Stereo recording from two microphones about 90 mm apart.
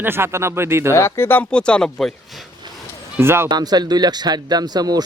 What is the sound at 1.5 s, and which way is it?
Speech, 10° left (ahead or behind).